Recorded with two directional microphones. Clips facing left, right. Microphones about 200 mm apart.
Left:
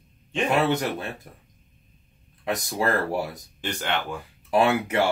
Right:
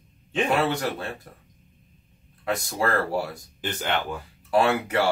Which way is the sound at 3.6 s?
5° right (ahead or behind).